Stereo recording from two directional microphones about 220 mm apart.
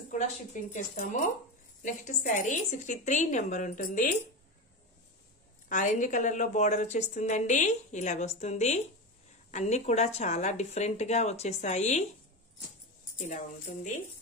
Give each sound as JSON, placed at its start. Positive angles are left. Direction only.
{"t": 0.1, "sound": "a woman's voice", "side_deg": 35}
{"t": 5.7, "sound": "a woman's voice", "side_deg": 35}